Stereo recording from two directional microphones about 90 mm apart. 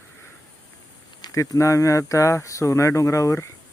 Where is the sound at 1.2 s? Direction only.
45° left (ahead or behind).